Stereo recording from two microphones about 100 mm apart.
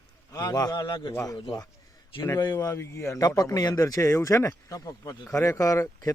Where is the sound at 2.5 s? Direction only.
30° left (ahead or behind).